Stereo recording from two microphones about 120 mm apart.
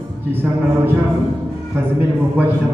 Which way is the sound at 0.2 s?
15° right (ahead or behind).